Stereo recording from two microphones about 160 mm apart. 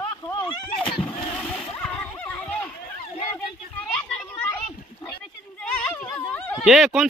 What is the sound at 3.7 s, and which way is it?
Children playing, 5° left (ahead or behind).